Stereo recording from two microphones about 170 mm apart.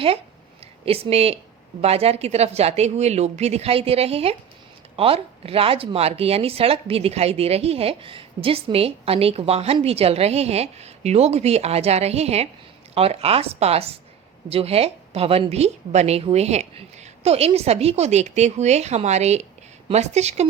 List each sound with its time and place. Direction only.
0.6 s speech: 35° right (ahead or behind)